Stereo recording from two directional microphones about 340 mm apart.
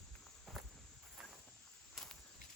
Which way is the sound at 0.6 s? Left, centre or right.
Centre.